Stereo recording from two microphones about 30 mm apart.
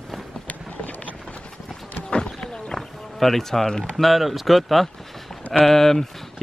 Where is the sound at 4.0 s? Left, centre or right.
Centre.